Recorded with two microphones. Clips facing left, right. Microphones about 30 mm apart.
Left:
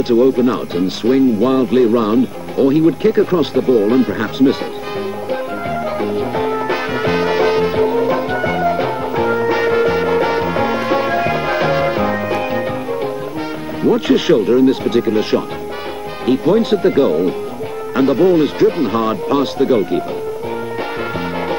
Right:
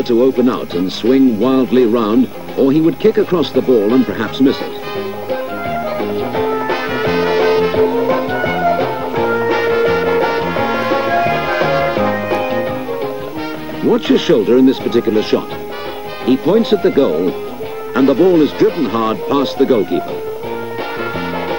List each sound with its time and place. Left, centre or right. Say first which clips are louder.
0.1 s speech: right 1 dB; centre
5.3 s music: right 2 dB; centre
13.8 s speech: right 1 dB; centre
21.0 s music: right 1 dB; centre